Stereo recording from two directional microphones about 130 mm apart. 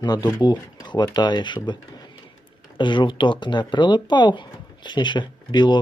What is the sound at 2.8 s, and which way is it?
Speech, 35° left (ahead or behind).